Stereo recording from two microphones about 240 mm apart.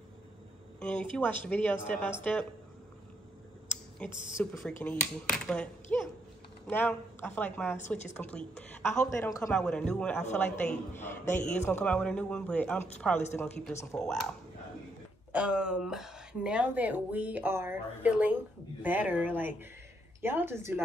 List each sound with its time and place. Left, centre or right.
0.7 s a woman's voice: centre
4.0 s a woman's voice: centre
15.3 s speech: centre